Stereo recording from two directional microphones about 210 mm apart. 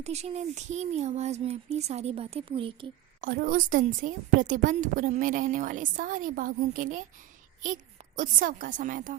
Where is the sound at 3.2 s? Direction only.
40° right (ahead or behind).